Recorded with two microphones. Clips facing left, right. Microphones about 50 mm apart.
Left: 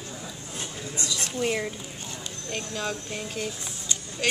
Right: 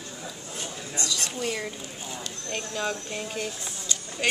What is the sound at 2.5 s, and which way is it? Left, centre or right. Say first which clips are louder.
Speech: right 1 dB; centre.